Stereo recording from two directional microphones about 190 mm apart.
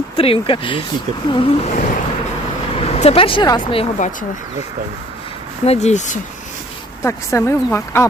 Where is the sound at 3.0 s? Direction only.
30° left (ahead or behind).